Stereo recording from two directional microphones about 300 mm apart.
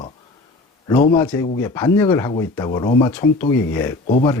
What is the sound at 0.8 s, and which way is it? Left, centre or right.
Speech, centre.